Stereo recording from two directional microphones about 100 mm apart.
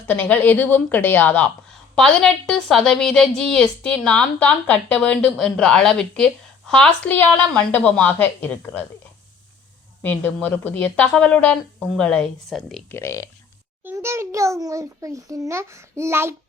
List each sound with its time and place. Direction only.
0.1 s a woman's voice: 15° left (ahead or behind)
2.0 s a woman's voice: 5° left (ahead or behind)
10.0 s a woman's voice: 20° left (ahead or behind); by 12.8 s centre (ahead or behind)
12.9 s speech: 30° left (ahead or behind)
13.9 s a child's voice: 25° right (ahead or behind)